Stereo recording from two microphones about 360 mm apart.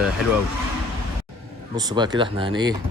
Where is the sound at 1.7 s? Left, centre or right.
Centre.